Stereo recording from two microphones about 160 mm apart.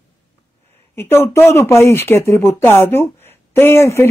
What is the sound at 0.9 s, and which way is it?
Speech, 15° left (ahead or behind).